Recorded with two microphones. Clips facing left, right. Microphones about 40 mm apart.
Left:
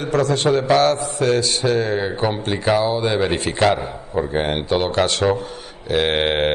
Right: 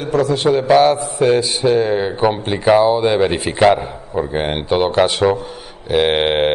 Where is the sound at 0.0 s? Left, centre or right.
Centre.